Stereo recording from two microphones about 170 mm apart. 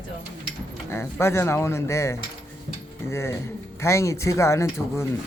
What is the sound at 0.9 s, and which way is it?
Speech, 15° left (ahead or behind).